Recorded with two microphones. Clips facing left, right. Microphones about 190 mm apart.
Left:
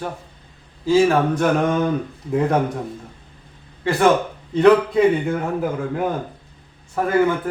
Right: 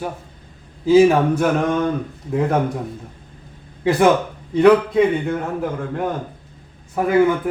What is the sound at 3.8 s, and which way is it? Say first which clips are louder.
Speech: right 4 dB; 15° right (ahead or behind).